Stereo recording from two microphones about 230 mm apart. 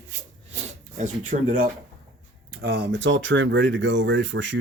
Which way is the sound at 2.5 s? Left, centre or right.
Right.